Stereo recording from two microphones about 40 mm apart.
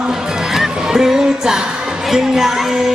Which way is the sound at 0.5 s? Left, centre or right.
Centre.